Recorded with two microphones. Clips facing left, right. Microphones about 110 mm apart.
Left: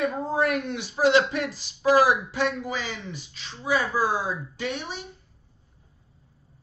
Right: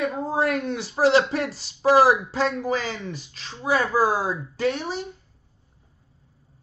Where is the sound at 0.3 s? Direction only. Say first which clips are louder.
Right 1 dB; 35° right (ahead or behind).